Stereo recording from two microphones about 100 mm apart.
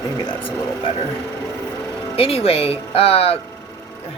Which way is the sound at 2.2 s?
75° left (ahead or behind).